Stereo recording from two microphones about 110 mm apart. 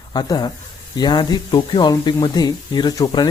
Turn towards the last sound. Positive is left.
turn(degrees=40)  # may be behind; listen again after turning